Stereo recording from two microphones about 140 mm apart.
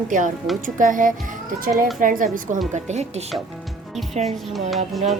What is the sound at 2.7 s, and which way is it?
Speech, 55° right (ahead or behind).